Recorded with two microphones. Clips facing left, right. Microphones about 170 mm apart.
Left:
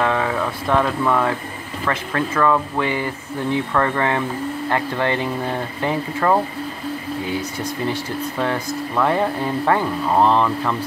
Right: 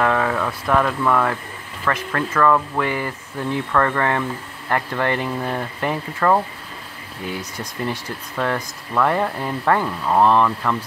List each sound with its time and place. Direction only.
0.0 s speech: 20° left (ahead or behind)
7.9 s speech: 25° left (ahead or behind)